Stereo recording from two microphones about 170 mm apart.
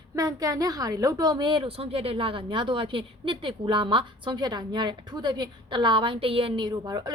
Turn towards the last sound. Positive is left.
turn(degrees=-25)  # may be behind; listen again after turning